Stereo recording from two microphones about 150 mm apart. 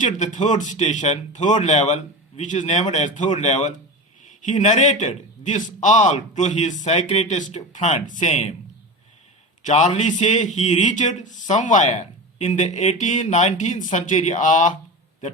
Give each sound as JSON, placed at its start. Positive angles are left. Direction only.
{"t": 0.0, "sound": "a man's voice", "side_deg": 55}
{"t": 9.6, "sound": "a man's voice", "side_deg": 50}